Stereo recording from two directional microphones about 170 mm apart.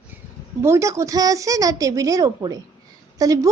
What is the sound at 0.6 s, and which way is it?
A woman's voice, 15° right (ahead or behind).